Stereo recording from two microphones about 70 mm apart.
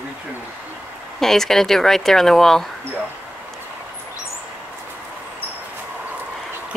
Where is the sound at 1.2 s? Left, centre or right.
Centre.